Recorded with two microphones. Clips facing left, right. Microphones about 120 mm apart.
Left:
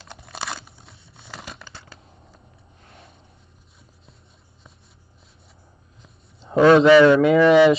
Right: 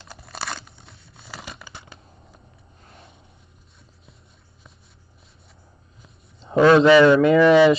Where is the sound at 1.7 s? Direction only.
20° right (ahead or behind).